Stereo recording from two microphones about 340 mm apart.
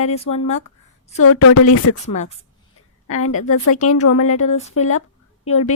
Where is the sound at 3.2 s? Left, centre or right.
Left.